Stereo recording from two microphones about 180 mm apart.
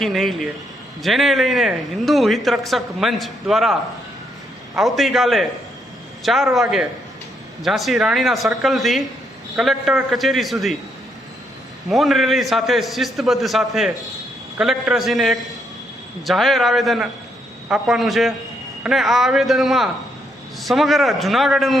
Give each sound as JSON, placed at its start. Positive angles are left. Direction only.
{"t": 0.0, "sound": "a man's voice", "side_deg": 0}
{"t": 4.8, "sound": "a man's voice", "side_deg": 0}
{"t": 11.9, "sound": "a man's voice", "side_deg": 0}